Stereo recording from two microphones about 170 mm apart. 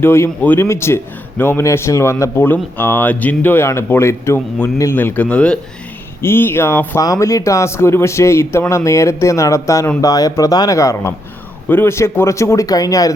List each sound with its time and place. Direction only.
0.0 s speech: 15° left (ahead or behind)